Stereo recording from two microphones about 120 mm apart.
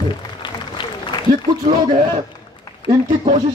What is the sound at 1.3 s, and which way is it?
Speech, 30° right (ahead or behind).